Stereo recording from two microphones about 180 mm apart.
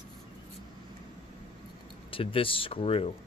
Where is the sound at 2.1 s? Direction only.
30° left (ahead or behind).